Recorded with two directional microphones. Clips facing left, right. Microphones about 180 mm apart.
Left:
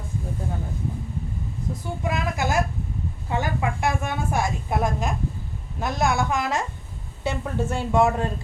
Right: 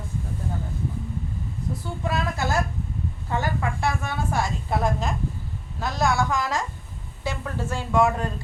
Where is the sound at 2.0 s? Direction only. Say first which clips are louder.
Left 1 dB; 15° left (ahead or behind).